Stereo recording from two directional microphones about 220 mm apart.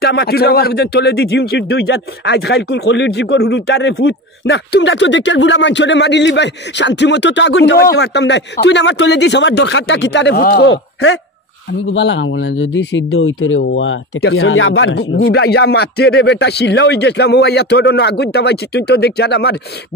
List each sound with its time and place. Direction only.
0.0 s a man's voice: 45° left (ahead or behind); by 15.0 s 65° left (ahead or behind)
15.2 s a man's voice: 50° left (ahead or behind)